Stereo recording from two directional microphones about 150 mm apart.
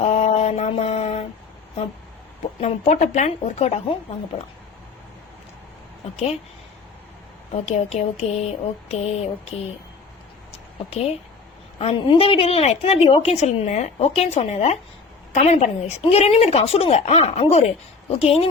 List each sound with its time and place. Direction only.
0.0 s mantra: 45° left (ahead or behind)
2.6 s a woman's voice: 45° left (ahead or behind)
4.3 s speech: 40° left (ahead or behind)
6.1 s a woman's voice: 45° left (ahead or behind)
7.5 s a woman's voice: 50° left (ahead or behind)
10.5 s a sound: 40° left (ahead or behind)
11.8 s a woman's voice: 40° left (ahead or behind)